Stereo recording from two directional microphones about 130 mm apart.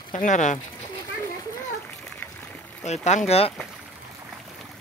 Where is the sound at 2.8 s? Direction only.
60° left (ahead or behind).